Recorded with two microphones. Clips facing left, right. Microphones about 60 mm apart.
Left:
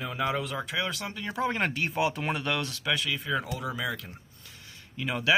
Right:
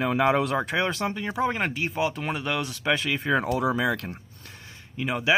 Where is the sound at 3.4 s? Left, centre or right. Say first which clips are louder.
Right 8 dB; right.